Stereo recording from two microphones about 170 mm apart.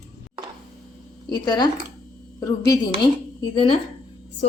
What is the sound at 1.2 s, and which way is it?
Speech, 25° left (ahead or behind).